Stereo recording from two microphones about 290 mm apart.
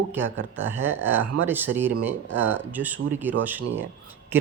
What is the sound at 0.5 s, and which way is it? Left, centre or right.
Speech, centre.